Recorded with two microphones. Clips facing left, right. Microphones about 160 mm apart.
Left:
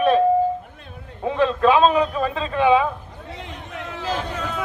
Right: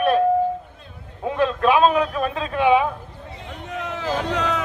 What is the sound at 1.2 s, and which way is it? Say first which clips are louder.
A man's voice: left 2 dB; 5° right (ahead or behind).